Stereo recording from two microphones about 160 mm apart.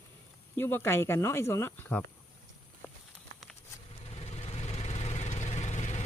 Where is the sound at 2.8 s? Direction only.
10° left (ahead or behind).